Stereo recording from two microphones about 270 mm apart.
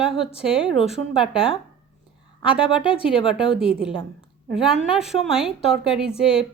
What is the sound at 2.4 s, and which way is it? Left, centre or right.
Speech, centre.